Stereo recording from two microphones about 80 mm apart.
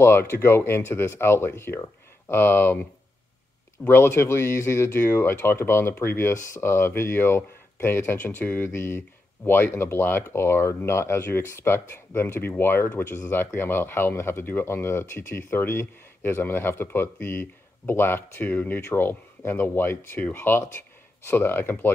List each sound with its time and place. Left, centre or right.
0.0 s speech: left
3.8 s speech: left